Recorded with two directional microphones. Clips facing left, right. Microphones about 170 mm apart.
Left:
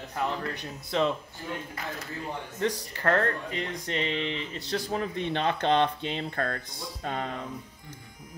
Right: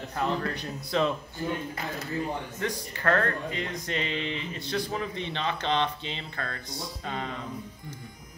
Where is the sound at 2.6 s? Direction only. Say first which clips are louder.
Left 5 dB; 30° left (ahead or behind); by 7.3 s 45° left (ahead or behind).